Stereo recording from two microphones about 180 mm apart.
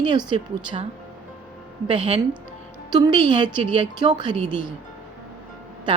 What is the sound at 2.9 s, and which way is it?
A woman's voice, 25° right (ahead or behind).